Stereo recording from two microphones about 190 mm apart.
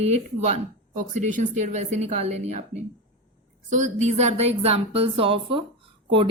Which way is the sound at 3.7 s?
40° right (ahead or behind).